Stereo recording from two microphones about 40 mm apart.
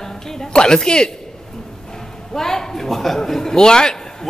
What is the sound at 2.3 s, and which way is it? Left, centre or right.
A woman's voice, centre.